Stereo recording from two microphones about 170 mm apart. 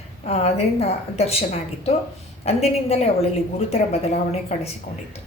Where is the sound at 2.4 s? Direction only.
35° left (ahead or behind).